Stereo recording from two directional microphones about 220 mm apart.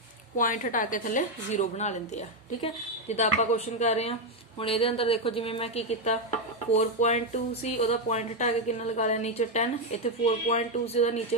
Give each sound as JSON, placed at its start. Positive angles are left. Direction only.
{"t": 0.3, "sound": "a woman's voice", "side_deg": 35}
{"t": 3.1, "sound": "a woman's voice", "side_deg": 30}